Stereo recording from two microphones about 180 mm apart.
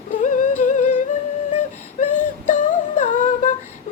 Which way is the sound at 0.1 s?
45° left (ahead or behind).